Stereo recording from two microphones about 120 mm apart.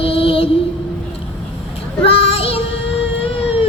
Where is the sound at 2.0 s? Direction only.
55° left (ahead or behind).